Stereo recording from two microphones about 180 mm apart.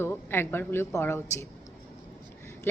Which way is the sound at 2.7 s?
10° left (ahead or behind).